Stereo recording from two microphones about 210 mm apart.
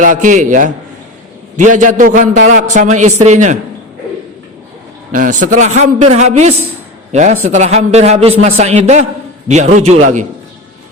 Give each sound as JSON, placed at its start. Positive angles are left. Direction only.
{"t": 0.0, "sound": "a man's voice", "side_deg": -35}
{"t": 5.1, "sound": "a man's voice", "side_deg": -40}